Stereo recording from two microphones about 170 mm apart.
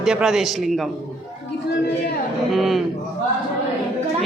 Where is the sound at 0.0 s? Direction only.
5° right (ahead or behind).